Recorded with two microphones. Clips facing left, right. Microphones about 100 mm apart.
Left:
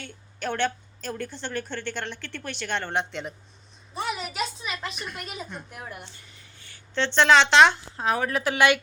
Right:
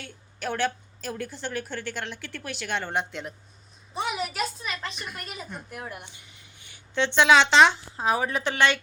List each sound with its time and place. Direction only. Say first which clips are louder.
0.0 s a woman's voice: left 1 dB; 5° right (ahead or behind)
3.9 s a sound: even; 15° right (ahead or behind)
4.2 s a sound: right 1 dB; centre (ahead or behind)
5.0 s a woman's voice: left 2 dB; centre (ahead or behind)
6.0 s a woman's voice: left 1 dB; 15° right (ahead or behind); by 8.5 s centre (ahead or behind)
8.5 s speech: left 3 dB; 10° left (ahead or behind)